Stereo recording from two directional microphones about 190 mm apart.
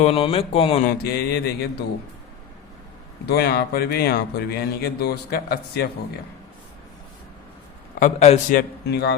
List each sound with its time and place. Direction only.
0.0 s speech: 30° left (ahead or behind)
0.9 s speech: 55° left (ahead or behind)
3.2 s speech: 55° left (ahead or behind)
7.9 s a man's voice: 40° left (ahead or behind)
8.5 s speech: 55° left (ahead or behind)